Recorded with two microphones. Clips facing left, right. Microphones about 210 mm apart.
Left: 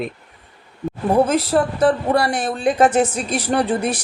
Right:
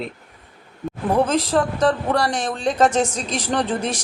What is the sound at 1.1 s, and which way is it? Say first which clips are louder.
Speech: left 2 dB; 10° left (ahead or behind).